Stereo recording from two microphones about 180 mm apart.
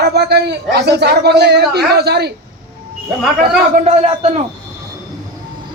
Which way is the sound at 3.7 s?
40° right (ahead or behind).